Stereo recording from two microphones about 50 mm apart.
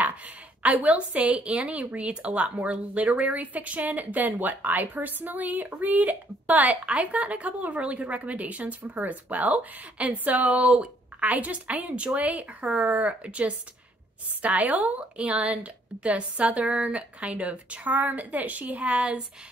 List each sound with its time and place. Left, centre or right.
0.6 s a woman's voice: right